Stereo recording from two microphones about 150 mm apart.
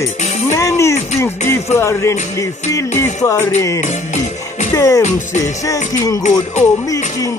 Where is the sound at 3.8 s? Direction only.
50° left (ahead or behind).